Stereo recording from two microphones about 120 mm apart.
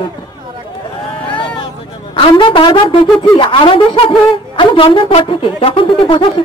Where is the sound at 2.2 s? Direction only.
45° left (ahead or behind).